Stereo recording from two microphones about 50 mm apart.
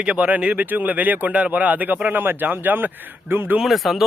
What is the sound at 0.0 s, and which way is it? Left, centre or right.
Speech, right.